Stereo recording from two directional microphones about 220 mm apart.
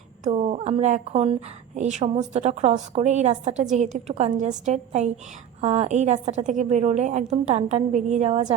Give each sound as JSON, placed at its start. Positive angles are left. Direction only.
{"t": 0.3, "sound": "a woman's voice", "side_deg": -30}